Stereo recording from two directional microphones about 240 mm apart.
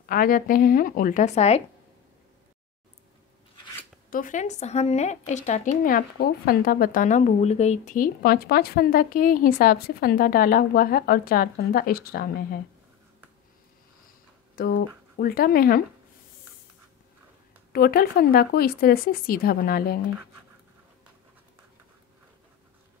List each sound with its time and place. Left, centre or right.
0.0 s a woman's voice: left
4.1 s a woman's voice: left
14.5 s a woman's voice: left
17.7 s a woman's voice: left